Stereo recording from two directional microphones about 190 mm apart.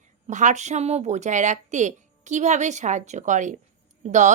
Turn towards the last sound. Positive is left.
turn(degrees=-40)  # may be behind; listen again after turning